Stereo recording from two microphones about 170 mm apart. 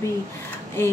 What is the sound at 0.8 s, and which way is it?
Speech, 10° left (ahead or behind).